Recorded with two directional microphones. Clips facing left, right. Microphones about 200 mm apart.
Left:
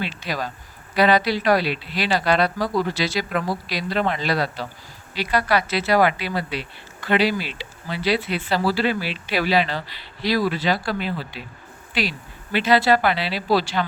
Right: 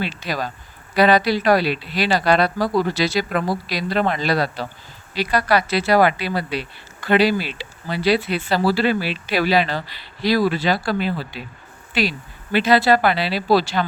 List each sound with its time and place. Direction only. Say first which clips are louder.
0.0 s speech: right 2 dB; 45° right (ahead or behind)
12.5 s speech: right 2 dB; 40° right (ahead or behind)